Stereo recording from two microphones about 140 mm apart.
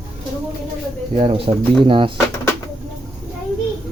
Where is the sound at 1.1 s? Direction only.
45° right (ahead or behind).